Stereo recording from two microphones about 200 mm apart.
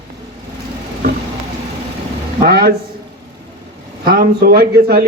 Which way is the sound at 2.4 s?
50° right (ahead or behind).